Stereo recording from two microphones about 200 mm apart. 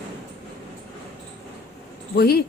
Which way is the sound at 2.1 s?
50° left (ahead or behind).